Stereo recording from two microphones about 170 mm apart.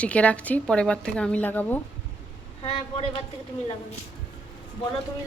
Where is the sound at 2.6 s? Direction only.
35° left (ahead or behind).